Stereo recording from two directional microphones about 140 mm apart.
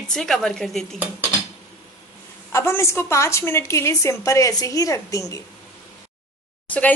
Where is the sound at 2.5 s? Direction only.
20° left (ahead or behind).